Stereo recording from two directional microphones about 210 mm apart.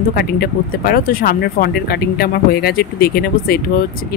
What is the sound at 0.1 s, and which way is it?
Speech, 45° left (ahead or behind).